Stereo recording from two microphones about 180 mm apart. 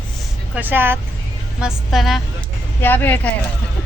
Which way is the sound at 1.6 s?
Centre (ahead or behind).